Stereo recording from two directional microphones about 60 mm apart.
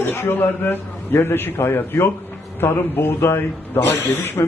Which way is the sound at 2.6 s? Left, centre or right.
Left.